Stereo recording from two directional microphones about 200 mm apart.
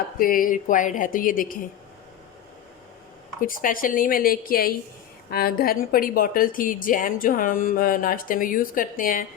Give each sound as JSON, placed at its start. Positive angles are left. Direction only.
{"t": 0.2, "sound": "a woman's voice", "side_deg": 45}
{"t": 3.4, "sound": "a woman's voice", "side_deg": 45}